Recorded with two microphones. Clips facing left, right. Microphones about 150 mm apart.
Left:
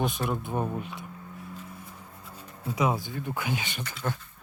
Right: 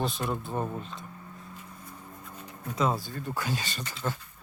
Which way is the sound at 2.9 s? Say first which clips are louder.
Left 1 dB; centre (ahead or behind).